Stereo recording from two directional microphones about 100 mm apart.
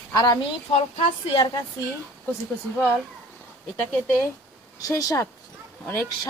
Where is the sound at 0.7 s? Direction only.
90° left.